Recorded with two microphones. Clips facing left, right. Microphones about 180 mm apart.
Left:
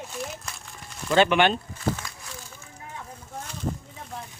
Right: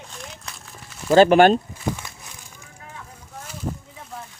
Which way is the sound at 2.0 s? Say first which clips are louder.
Even; 25° right (ahead or behind).